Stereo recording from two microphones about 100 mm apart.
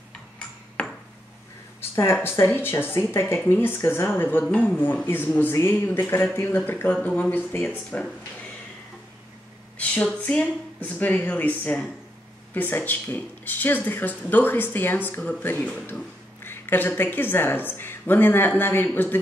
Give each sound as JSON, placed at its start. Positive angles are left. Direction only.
{"t": 0.8, "sound": "ping", "side_deg": 10}
{"t": 1.8, "sound": "speech", "side_deg": 25}
{"t": 9.8, "sound": "speech", "side_deg": 15}